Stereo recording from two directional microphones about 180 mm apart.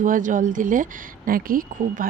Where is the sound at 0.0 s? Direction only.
45° right (ahead or behind).